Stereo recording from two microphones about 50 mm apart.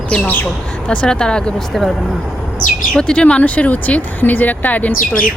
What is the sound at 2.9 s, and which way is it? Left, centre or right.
A woman's voice, left.